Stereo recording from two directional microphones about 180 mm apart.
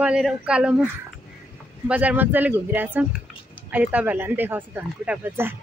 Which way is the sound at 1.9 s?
10° right (ahead or behind).